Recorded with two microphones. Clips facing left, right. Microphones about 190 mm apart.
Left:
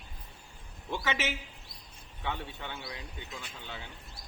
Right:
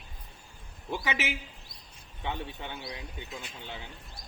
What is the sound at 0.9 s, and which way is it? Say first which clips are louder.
A man's voice: right 1 dB; 10° right (ahead or behind).